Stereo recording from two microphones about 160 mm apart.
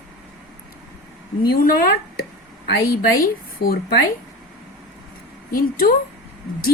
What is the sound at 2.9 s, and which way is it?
Speech, 70° left (ahead or behind).